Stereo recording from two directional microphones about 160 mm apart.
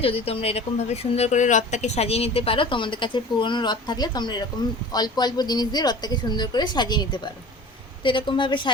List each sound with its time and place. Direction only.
0.0 s a woman's voice: 40° left (ahead or behind)